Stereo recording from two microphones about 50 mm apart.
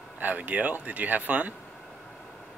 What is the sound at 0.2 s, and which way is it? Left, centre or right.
Speech, right.